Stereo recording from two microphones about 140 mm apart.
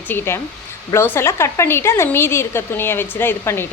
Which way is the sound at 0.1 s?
15° left (ahead or behind).